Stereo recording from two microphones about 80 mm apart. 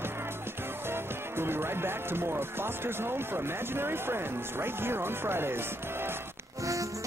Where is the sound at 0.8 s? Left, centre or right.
Right.